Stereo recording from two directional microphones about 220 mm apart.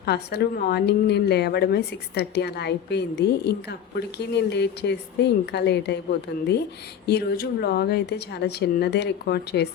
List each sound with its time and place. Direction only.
0.0 s a woman's voice: 45° left (ahead or behind)